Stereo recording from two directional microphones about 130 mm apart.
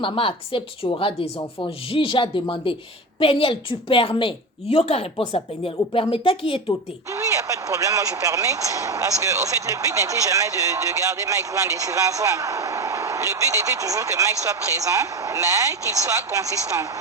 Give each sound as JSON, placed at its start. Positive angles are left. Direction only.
{"t": 0.0, "sound": "a woman's voice", "side_deg": 45}
{"t": 7.1, "sound": "speech", "side_deg": -25}